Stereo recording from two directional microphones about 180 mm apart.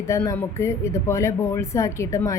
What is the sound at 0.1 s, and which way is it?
A woman's voice, 10° left (ahead or behind).